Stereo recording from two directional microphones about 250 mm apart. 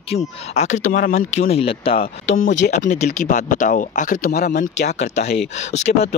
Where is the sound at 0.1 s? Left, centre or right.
Left.